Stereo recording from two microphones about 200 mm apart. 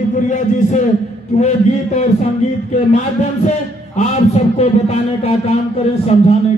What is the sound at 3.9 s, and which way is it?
A man's voice, 30° left (ahead or behind).